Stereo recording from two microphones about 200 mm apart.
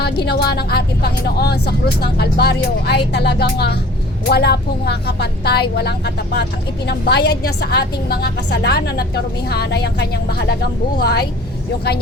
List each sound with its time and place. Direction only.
0.0 s speech: 55° left (ahead or behind)